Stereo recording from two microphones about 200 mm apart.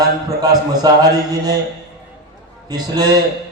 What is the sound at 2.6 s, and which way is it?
Speech, 20° right (ahead or behind).